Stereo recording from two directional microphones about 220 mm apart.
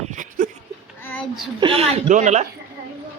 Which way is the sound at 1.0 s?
5° left (ahead or behind).